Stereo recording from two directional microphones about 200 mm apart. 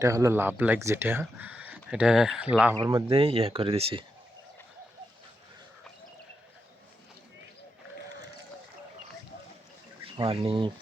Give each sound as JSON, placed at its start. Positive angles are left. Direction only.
{"t": 0.0, "sound": "speech", "side_deg": -15}
{"t": 2.7, "sound": "speech", "side_deg": -25}
{"t": 10.0, "sound": "speech", "side_deg": -25}